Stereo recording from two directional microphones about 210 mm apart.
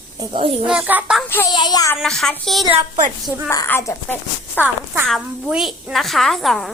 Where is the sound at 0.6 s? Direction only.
5° right (ahead or behind).